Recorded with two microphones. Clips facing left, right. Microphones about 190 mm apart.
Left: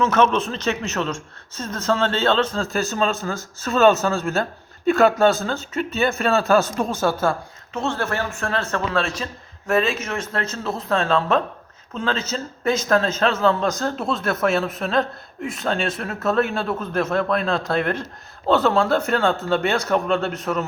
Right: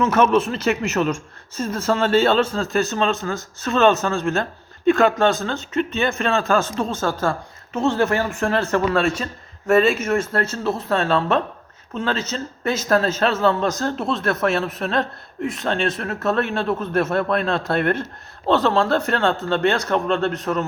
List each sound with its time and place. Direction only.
0.0 s a man's voice: 10° right (ahead or behind)
7.8 s a man's voice: 15° right (ahead or behind)
8.9 s a man's voice: 5° right (ahead or behind)